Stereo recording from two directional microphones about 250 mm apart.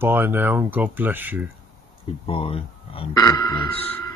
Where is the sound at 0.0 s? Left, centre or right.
Centre.